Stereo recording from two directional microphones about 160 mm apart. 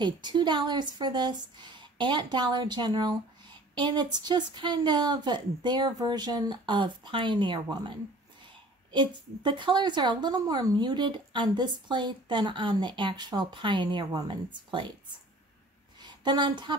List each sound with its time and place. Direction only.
0.0 s a woman's voice: 30° right (ahead or behind)
8.9 s a woman's voice: 30° right (ahead or behind)
16.0 s a woman's voice: 25° right (ahead or behind)